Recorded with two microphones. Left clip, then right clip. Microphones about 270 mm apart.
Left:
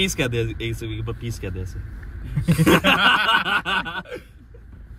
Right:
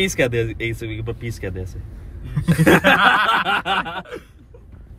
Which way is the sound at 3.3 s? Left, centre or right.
Centre.